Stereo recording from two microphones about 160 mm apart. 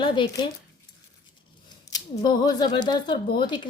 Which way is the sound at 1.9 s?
25° left (ahead or behind).